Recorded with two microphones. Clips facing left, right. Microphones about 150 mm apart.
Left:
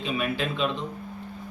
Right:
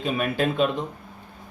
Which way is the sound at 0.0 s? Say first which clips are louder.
Right 4 dB; 45° right (ahead or behind).